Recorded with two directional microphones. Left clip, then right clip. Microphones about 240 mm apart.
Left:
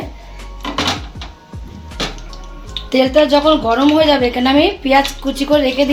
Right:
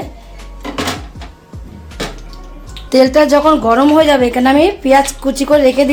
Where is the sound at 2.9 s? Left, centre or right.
Right.